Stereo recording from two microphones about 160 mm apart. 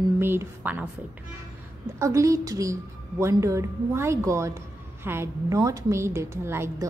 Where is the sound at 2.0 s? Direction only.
20° right (ahead or behind).